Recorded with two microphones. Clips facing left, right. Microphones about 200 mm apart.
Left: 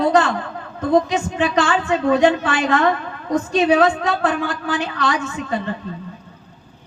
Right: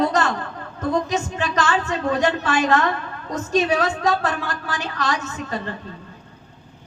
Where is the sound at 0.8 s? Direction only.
45° right (ahead or behind).